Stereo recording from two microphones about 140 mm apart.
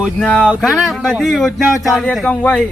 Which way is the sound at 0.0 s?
5° left (ahead or behind).